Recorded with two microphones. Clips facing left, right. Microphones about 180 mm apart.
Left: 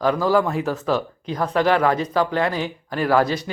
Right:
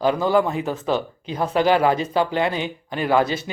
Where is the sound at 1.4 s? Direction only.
25° right (ahead or behind).